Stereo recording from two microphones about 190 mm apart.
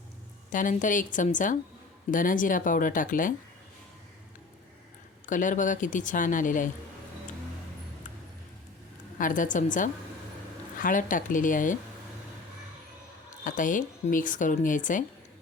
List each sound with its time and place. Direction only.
0.5 s speech: 45° left (ahead or behind)
5.2 s speech: 45° left (ahead or behind)
9.1 s speech: 45° left (ahead or behind)
13.4 s speech: 45° left (ahead or behind)